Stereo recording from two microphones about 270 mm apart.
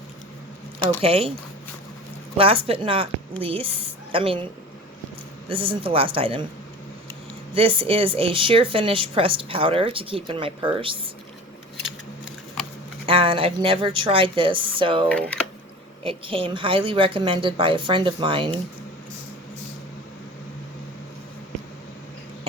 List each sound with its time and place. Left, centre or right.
1.0 s speech: right
2.4 s speech: right
5.5 s speech: centre
7.5 s speech: centre
13.1 s speech: centre